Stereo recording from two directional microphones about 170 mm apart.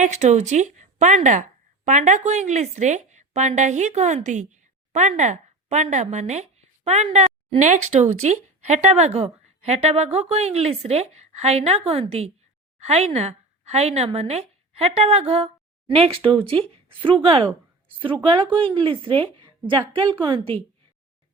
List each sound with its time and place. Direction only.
0.0 s a woman's voice: 45° right (ahead or behind)